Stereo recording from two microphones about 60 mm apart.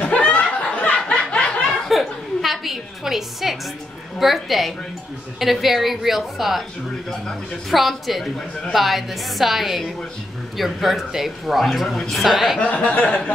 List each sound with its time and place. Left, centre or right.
0.1 s snicker: left
1.9 s a sound: centre
4.2 s a woman's voice: centre
12.5 s speech: centre